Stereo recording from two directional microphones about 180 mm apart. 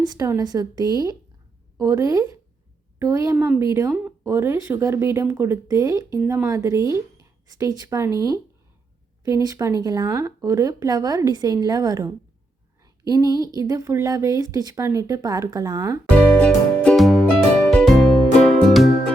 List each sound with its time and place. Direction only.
0.0 s speech: 20° right (ahead or behind)
16.0 s music: 5° left (ahead or behind)